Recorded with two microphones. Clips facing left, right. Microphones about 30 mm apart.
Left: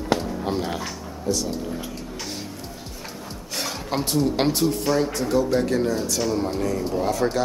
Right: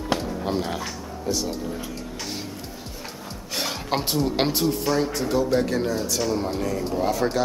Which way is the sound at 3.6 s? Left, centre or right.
Centre.